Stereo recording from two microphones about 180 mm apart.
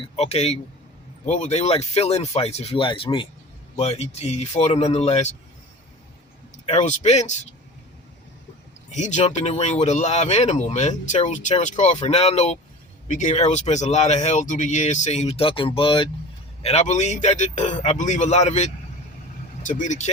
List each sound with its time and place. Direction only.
0.2 s speech: 35° left (ahead or behind)
6.7 s speech: 40° left (ahead or behind)
8.9 s speech: 40° left (ahead or behind)